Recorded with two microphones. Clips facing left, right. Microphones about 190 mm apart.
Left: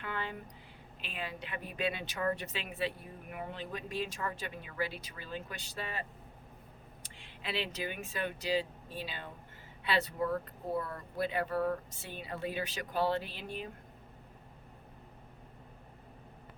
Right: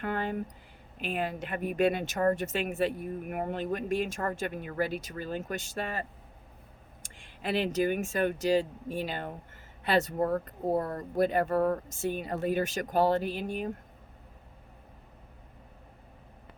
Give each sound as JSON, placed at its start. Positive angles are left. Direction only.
{"t": 0.0, "sound": "speech", "side_deg": -45}